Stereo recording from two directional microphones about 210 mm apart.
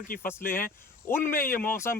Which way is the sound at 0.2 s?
10° left (ahead or behind).